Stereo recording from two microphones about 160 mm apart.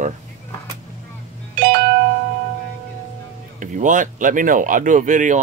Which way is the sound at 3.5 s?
55° right (ahead or behind).